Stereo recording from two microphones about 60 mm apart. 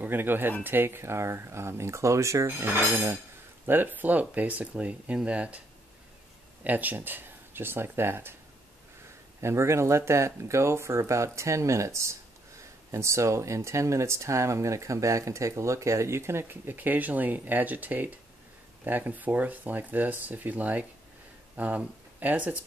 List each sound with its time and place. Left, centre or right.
0.0 s dishes: right
0.7 s speech: right
2.4 s dishes: right
3.6 s speech: right
6.6 s speech: right
9.4 s speech: right